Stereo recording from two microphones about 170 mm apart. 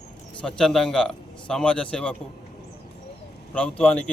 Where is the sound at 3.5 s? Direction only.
10° left (ahead or behind).